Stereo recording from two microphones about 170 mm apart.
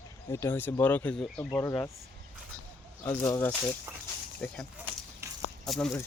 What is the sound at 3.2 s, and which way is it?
Speech, 15° left (ahead or behind).